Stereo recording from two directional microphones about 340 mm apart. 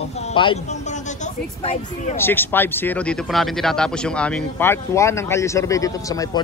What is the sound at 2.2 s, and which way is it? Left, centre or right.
Speech, centre.